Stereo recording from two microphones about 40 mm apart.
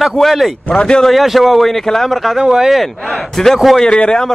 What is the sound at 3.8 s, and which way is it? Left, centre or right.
Speech, left.